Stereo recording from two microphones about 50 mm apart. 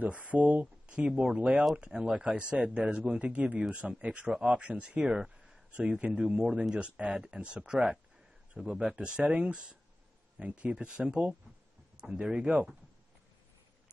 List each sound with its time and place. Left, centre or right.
0.0 s speech: right
4.3 s speech: centre
4.6 s speech: right
6.1 s speech: centre